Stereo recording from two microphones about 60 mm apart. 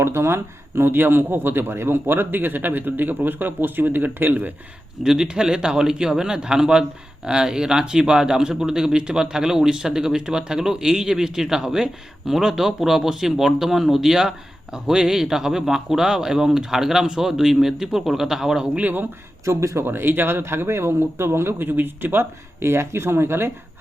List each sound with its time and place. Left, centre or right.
0.0 s speech: right
5.0 s speech: centre
18.8 s speech: right
19.5 s speech: right
19.8 s speech: right